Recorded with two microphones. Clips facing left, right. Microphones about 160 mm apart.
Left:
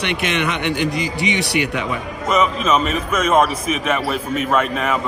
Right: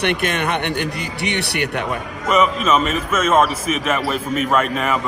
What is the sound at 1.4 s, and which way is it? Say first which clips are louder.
Speech: left 2 dB; 65° right (ahead or behind).